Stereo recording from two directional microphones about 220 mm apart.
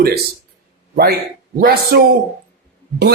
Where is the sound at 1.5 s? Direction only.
45° right (ahead or behind).